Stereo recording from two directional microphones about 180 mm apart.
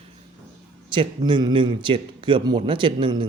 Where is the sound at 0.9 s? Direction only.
25° right (ahead or behind).